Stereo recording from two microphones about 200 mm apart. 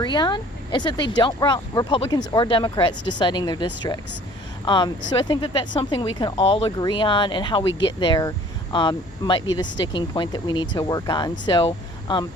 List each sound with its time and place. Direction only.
0.0 s speech: 20° left (ahead or behind)